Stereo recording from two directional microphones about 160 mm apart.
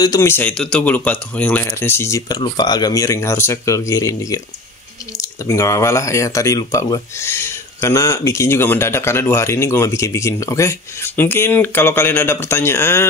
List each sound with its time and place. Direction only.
0.0 s speech: 20° left (ahead or behind)